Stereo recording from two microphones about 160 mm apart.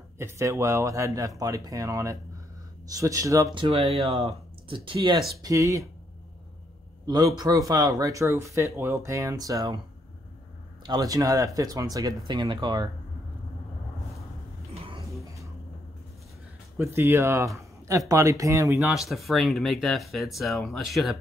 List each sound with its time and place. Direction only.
0.2 s speech: 20° right (ahead or behind)
3.5 s speech: 35° right (ahead or behind)
5.4 s speech: 20° right (ahead or behind)
7.1 s speech: 25° right (ahead or behind)
10.8 s speech: 25° right (ahead or behind)
14.7 s a sound: 35° right (ahead or behind)
16.7 s speech: 15° right (ahead or behind)
18.8 s speech: centre (ahead or behind)